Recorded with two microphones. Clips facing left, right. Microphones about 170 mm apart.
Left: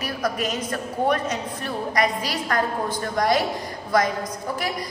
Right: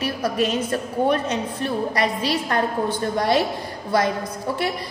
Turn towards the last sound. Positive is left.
turn(degrees=-30)  # may be behind; listen again after turning